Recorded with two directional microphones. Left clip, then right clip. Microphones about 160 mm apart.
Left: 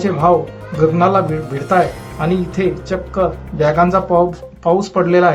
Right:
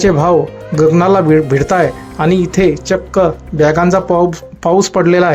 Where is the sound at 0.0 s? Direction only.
40° right (ahead or behind).